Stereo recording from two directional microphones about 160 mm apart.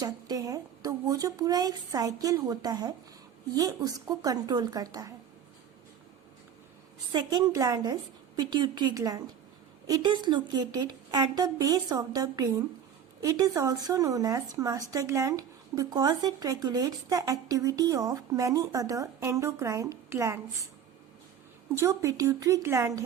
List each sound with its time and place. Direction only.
0.0 s speech: 20° right (ahead or behind)
7.1 s speech: 30° right (ahead or behind)
21.8 s speech: 20° right (ahead or behind)